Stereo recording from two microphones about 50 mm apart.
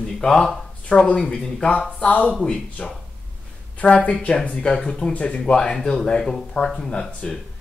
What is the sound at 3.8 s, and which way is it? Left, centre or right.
Speech, left.